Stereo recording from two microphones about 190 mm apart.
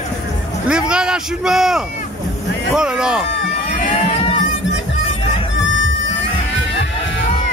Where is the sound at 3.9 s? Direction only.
30° left (ahead or behind).